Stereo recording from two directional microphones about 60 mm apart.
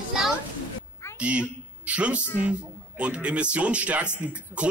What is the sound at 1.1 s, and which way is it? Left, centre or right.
A woman's voice, right.